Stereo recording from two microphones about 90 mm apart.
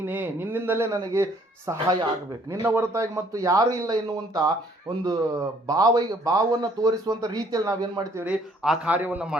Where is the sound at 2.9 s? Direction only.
35° right (ahead or behind).